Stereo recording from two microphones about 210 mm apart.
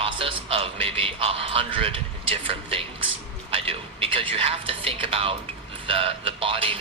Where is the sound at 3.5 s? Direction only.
25° right (ahead or behind).